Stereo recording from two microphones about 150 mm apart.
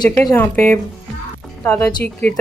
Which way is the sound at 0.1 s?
15° left (ahead or behind).